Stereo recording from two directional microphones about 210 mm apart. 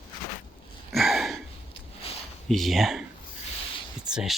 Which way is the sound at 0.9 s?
Centre (ahead or behind).